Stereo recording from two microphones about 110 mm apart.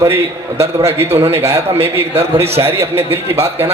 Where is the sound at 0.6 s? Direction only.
25° right (ahead or behind).